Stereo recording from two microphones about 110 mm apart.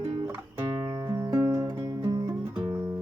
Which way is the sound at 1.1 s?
20° right (ahead or behind).